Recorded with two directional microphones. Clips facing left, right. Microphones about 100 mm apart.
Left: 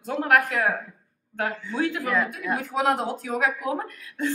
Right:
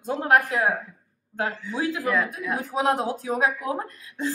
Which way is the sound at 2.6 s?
20° right (ahead or behind).